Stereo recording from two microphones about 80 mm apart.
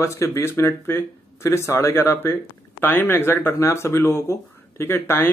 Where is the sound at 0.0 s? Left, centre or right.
Left.